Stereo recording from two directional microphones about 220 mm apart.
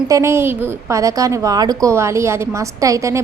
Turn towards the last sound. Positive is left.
turn(degrees=-15)  # may be behind; listen again after turning